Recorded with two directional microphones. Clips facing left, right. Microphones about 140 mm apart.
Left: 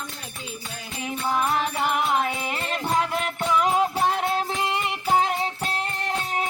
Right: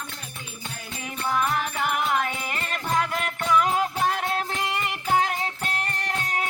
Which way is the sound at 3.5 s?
30° left (ahead or behind).